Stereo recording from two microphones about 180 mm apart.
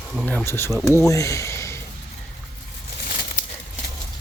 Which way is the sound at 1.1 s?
15° left (ahead or behind).